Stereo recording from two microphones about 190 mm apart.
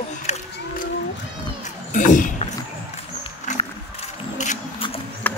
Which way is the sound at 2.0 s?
40° left (ahead or behind).